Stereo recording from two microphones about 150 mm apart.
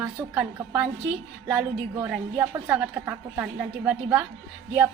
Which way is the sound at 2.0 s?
10° right (ahead or behind).